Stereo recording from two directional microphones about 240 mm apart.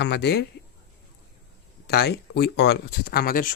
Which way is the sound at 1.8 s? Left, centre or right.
Left.